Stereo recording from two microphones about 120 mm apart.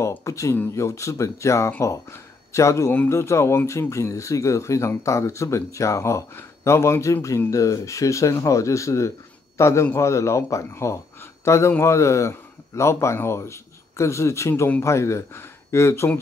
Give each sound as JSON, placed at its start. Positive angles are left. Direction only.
{"t": 0.0, "sound": "a man's voice", "side_deg": 25}